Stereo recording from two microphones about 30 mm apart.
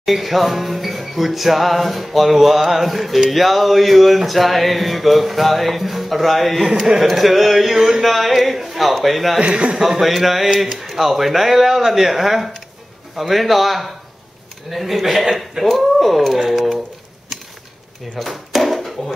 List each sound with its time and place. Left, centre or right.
0.0 s music: centre
7.7 s a sound: centre
8.0 s music: centre
9.4 s a man's voice: right
9.8 s a man's voice: centre
13.1 s music: centre
18.2 s music: centre
18.5 s a sound: centre